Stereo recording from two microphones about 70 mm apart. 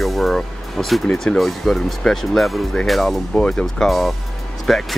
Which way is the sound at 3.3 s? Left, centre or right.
Centre.